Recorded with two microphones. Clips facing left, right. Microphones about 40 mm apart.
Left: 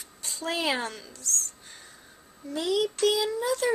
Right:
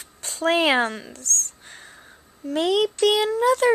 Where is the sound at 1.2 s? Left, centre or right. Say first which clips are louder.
Right 3 dB; right.